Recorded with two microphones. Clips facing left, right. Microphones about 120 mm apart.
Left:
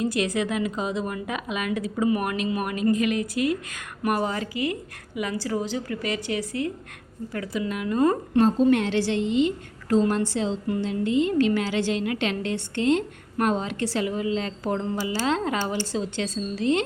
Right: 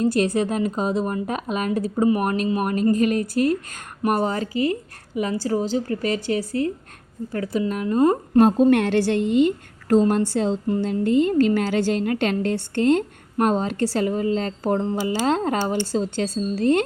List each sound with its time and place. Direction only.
0.3 s speech: 40° right (ahead or behind)
8.4 s a woman's voice: 55° right (ahead or behind)